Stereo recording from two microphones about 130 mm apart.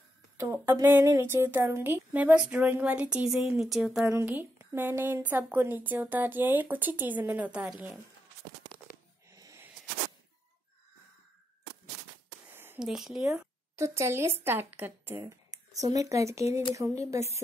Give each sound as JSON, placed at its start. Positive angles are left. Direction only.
{"t": 0.4, "sound": "speech", "side_deg": -25}
{"t": 0.8, "sound": "a woman's voice", "side_deg": -15}
{"t": 4.1, "sound": "a woman's voice", "side_deg": -15}
{"t": 9.3, "sound": "a sound", "side_deg": -25}
{"t": 12.7, "sound": "speech", "side_deg": -5}
{"t": 13.7, "sound": "speech", "side_deg": -20}